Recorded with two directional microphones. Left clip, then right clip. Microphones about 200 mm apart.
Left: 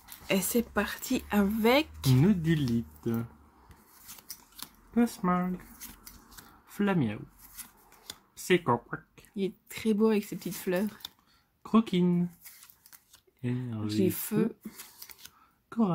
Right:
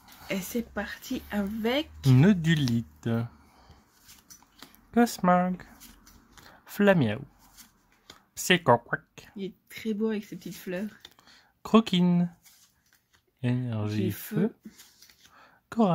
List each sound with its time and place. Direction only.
0.3 s speech: 15° left (ahead or behind)
2.1 s speech: 60° right (ahead or behind)
4.9 s speech: 60° right (ahead or behind)
6.6 s speech: 60° right (ahead or behind)
8.5 s speech: 60° right (ahead or behind)
9.3 s speech: 15° left (ahead or behind)
11.2 s a sound: 55° right (ahead or behind)
13.4 s speech: 60° right (ahead or behind)
13.9 s speech: 15° left (ahead or behind)
15.7 s speech: 55° right (ahead or behind)